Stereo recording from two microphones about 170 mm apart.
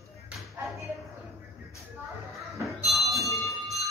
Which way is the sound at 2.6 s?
Centre (ahead or behind).